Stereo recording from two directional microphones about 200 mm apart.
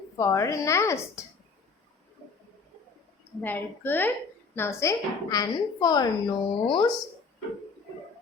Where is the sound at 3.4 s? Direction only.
10° left (ahead or behind).